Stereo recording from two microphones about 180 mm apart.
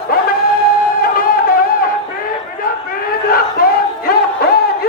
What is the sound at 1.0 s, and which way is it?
Music, 55° left (ahead or behind).